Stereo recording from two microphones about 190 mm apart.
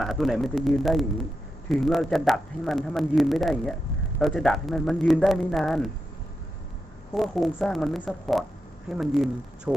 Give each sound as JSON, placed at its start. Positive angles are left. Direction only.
{"t": 0.0, "sound": "speech", "side_deg": 0}
{"t": 7.1, "sound": "speech", "side_deg": 0}